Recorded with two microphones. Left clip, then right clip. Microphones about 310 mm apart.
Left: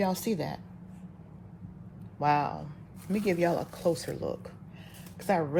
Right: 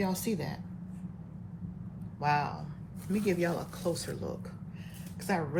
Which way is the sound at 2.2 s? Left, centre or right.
Left.